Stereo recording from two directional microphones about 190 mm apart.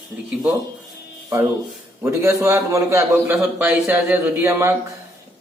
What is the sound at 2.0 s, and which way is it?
Speech, 15° right (ahead or behind).